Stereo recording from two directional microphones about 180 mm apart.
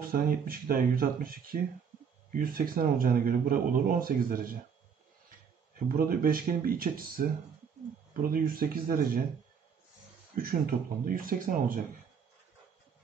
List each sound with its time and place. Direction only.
0.1 s speech: 55° right (ahead or behind)
5.9 s speech: 55° right (ahead or behind)
10.3 s speech: 55° right (ahead or behind)